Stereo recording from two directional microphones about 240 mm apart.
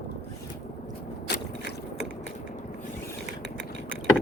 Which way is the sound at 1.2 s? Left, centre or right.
Left.